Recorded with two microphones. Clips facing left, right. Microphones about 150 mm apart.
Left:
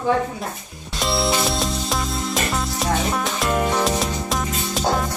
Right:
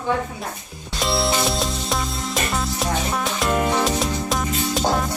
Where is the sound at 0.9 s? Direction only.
Centre (ahead or behind).